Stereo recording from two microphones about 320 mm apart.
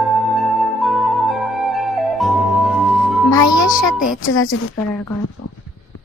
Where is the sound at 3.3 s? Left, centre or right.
Centre.